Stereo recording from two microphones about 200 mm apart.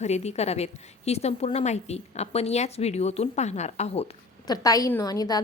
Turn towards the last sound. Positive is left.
turn(degrees=20)  # may be behind; listen again after turning